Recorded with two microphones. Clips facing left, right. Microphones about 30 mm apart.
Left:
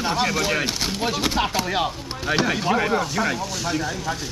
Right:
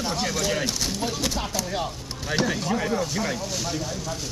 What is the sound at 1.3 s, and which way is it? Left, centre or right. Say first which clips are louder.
Speech: left 6 dB; left.